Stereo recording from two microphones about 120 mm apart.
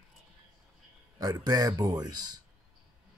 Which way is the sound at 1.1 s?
30° right (ahead or behind).